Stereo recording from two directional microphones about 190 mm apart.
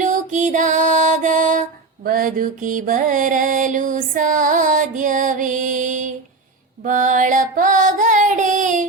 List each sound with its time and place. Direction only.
0.0 s music: 40° right (ahead or behind)